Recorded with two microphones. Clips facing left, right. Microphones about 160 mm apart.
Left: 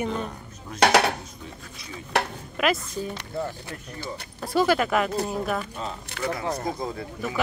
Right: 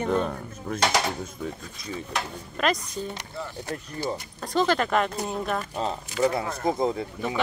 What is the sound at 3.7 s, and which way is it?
Speech, 40° right (ahead or behind).